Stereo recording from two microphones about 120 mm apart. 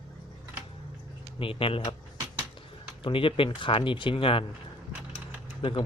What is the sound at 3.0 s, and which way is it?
Speech, 45° left (ahead or behind).